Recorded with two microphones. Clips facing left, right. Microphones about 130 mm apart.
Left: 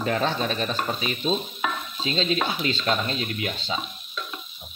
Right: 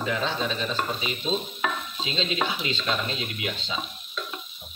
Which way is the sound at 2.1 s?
45° left (ahead or behind).